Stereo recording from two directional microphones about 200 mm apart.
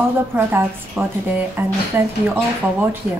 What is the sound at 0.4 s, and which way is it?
A woman's voice, 10° right (ahead or behind).